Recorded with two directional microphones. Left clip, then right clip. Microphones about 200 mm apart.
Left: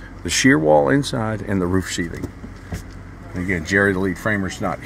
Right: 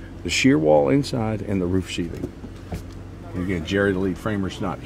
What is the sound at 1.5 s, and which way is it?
Speech, 15° left (ahead or behind).